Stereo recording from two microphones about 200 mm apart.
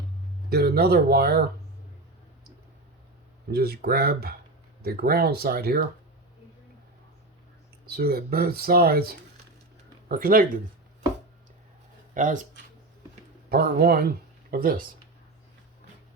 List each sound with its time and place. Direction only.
0.5 s speech: 55° right (ahead or behind)
3.5 s speech: 55° right (ahead or behind)
7.9 s speech: 50° right (ahead or behind)
12.1 s speech: 40° right (ahead or behind)
13.5 s speech: 50° right (ahead or behind)